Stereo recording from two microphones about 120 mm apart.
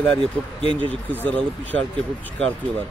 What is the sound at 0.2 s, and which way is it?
Speech, 45° right (ahead or behind).